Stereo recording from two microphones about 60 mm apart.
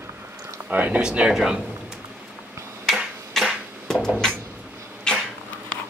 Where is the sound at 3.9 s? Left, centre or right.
Centre.